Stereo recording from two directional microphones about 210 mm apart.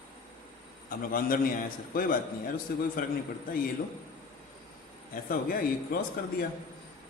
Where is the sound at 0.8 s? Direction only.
40° left (ahead or behind).